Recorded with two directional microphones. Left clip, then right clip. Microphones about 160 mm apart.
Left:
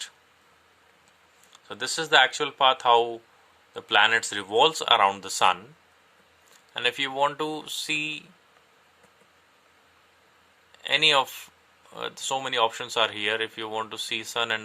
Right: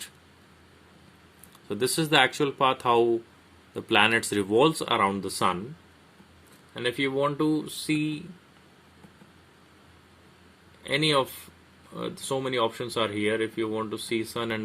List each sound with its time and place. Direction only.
1.6 s speech: 20° left (ahead or behind)
6.7 s speech: 35° left (ahead or behind)
10.8 s speech: 40° left (ahead or behind)